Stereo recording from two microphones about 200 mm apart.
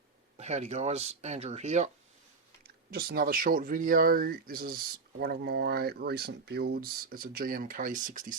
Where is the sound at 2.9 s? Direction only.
45° right (ahead or behind).